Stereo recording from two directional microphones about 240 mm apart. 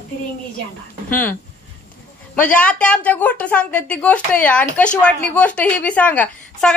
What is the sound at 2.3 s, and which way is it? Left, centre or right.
A woman's voice, centre.